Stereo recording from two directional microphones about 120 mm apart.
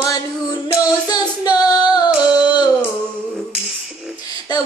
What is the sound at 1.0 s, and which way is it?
Female singing, 35° left (ahead or behind).